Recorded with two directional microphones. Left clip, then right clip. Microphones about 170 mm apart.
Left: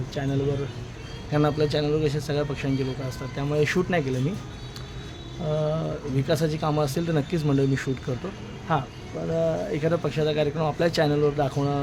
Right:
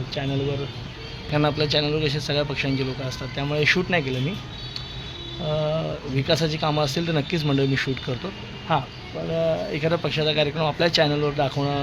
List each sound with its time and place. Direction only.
1.3 s a man's voice: 10° left (ahead or behind)
5.5 s a man's voice: 20° left (ahead or behind)
7.4 s speech: centre (ahead or behind)
8.7 s a man's voice: 15° left (ahead or behind)